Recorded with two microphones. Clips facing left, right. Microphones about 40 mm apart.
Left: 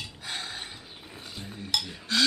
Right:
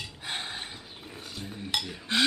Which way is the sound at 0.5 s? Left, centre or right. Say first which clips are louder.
Right 1 dB; centre.